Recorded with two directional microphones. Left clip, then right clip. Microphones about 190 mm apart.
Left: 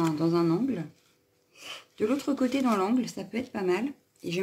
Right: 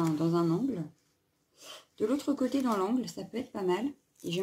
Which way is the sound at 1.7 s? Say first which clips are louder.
Left 3 dB; 20° left (ahead or behind).